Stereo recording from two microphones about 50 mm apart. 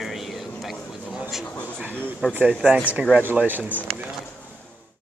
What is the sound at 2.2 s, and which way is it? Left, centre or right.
Speech, right.